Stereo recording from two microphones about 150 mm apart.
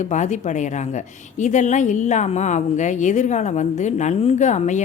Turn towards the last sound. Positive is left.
turn(degrees=50)  # may be behind; listen again after turning